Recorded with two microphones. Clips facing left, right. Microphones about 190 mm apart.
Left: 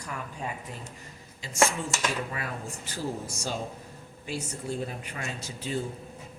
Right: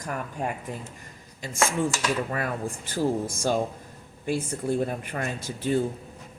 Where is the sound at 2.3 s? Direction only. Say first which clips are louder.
Right 7 dB; 50° right (ahead or behind).